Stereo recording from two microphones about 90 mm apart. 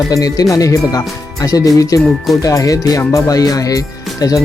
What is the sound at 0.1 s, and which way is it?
Speech, 45° left (ahead or behind).